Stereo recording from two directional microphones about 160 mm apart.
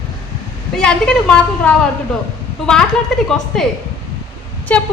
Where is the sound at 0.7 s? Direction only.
5° left (ahead or behind).